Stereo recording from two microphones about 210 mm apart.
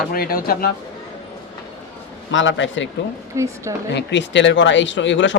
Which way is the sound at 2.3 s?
65° left (ahead or behind).